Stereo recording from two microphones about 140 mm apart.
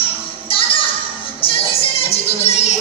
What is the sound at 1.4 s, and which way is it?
Music, 45° left (ahead or behind).